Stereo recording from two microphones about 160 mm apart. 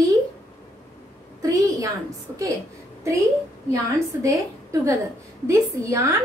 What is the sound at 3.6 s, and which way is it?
A woman's voice, 20° right (ahead or behind).